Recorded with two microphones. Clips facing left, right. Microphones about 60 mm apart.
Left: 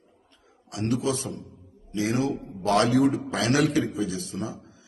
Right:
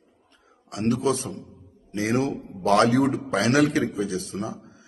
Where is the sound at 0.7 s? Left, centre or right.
Right.